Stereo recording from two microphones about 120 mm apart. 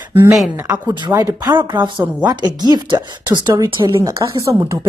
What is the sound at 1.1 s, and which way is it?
Speech, 25° right (ahead or behind).